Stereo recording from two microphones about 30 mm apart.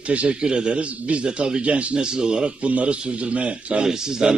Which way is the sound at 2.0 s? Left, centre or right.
Right.